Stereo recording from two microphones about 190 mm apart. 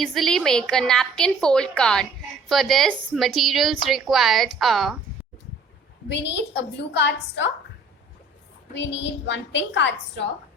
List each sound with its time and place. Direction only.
0.0 s a woman's voice: centre (ahead or behind)
6.1 s a woman's voice: 65° left (ahead or behind)
8.7 s a woman's voice: 65° left (ahead or behind)